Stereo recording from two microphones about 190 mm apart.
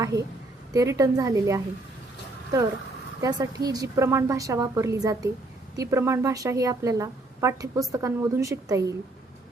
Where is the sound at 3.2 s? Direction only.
20° right (ahead or behind).